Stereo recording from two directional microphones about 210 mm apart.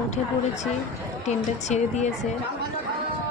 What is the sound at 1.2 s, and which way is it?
Speech, 35° left (ahead or behind).